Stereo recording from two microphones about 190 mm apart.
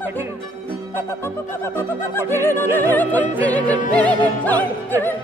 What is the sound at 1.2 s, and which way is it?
Opera, 15° left (ahead or behind).